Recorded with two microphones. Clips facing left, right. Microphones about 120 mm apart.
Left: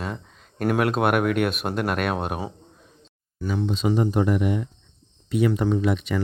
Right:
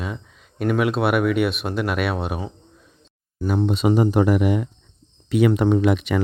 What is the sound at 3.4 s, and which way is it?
Speech, 40° right (ahead or behind).